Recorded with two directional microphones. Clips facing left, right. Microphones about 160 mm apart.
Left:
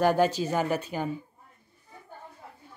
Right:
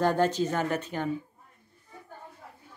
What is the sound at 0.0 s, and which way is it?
Speech, 10° left (ahead or behind).